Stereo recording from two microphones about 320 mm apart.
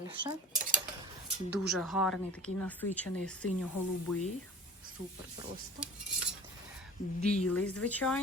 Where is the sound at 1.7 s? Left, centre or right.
Centre.